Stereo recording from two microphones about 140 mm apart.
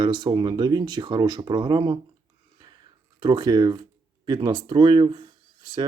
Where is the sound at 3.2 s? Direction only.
30° right (ahead or behind).